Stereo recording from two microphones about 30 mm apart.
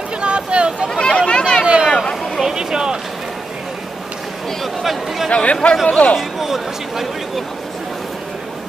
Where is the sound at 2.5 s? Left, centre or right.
Right.